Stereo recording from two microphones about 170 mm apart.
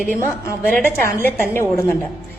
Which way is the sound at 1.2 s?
15° left (ahead or behind).